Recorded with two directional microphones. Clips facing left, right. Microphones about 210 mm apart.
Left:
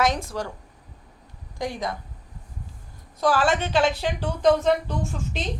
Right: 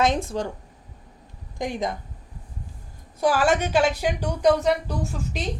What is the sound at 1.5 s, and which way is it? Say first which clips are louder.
Speech: right 2 dB; 20° right (ahead or behind).